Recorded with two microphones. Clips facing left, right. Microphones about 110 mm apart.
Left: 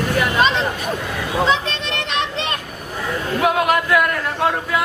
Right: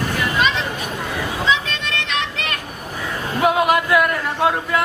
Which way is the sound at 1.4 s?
40° left (ahead or behind).